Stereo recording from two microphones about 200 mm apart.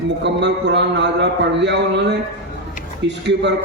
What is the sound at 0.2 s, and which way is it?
A man's voice, 60° right (ahead or behind).